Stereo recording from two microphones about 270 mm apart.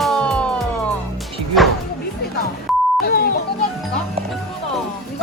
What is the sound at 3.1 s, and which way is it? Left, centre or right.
Music, left.